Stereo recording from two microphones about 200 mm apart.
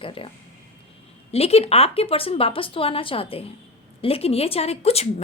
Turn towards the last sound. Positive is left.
turn(degrees=30)  # may be behind; listen again after turning